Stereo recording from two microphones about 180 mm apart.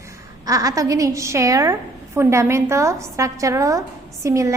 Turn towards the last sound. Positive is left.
turn(degrees=-15)  # may be behind; listen again after turning